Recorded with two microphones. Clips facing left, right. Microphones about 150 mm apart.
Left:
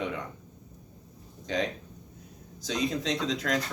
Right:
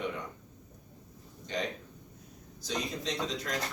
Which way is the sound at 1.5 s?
90° left.